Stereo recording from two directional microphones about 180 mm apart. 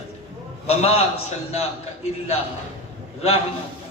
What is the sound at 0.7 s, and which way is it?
Speech, 35° left (ahead or behind).